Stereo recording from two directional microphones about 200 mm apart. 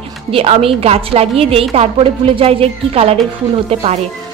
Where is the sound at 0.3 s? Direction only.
30° right (ahead or behind).